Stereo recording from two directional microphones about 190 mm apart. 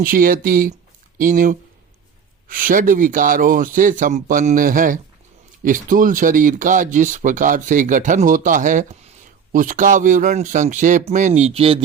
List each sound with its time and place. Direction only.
0.0 s speech: 45° right (ahead or behind); by 11.8 s 30° right (ahead or behind)